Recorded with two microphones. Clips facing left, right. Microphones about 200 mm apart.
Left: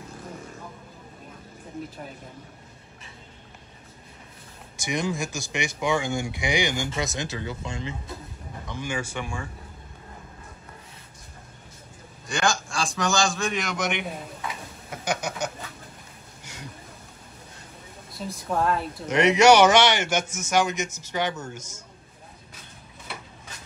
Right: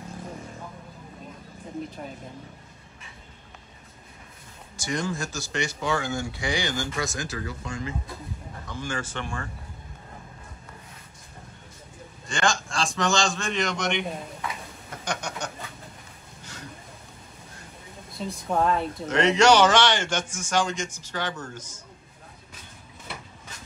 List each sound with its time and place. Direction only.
4.8 s speech: 15° left (ahead or behind)
8.6 s speech: 15° left (ahead or behind)
12.3 s a man's voice: centre (ahead or behind)
14.9 s a sound: 5° left (ahead or behind)
18.1 s a man's voice: centre (ahead or behind)
19.0 s speech: 15° left (ahead or behind)